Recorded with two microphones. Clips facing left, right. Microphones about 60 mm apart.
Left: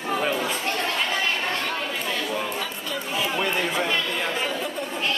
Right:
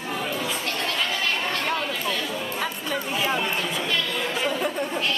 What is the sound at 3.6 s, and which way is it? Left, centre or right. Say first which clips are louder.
Chatter: left 2 dB; left.